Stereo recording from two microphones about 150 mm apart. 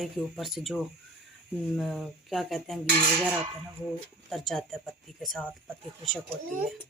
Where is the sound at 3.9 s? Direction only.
Centre (ahead or behind).